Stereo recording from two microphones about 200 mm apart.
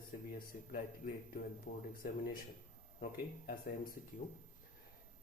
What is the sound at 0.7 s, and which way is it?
A man's voice, 40° left (ahead or behind).